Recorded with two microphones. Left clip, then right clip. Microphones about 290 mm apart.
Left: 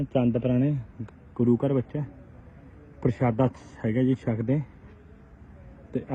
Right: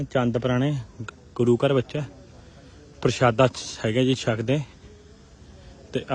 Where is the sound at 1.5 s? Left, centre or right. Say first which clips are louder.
Right 5 dB; left.